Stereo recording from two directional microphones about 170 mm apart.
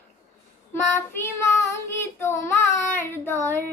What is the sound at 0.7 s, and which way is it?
Child singing, 15° left (ahead or behind).